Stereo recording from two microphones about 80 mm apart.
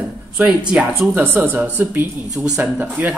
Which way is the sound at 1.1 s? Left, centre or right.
Right.